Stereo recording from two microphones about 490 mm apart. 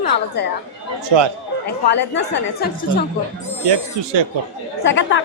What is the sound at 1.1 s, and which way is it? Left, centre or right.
Speech, right.